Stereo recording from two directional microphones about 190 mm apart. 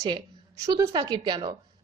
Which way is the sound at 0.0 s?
20° right (ahead or behind).